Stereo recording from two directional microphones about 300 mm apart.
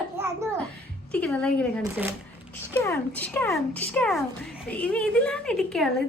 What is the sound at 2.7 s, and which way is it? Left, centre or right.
Speech, centre.